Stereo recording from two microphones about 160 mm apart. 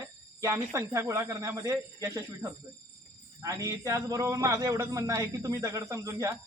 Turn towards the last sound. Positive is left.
turn(degrees=-20)  # may be behind; listen again after turning